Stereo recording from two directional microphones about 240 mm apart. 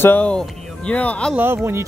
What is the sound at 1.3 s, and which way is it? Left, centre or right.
Speech, centre.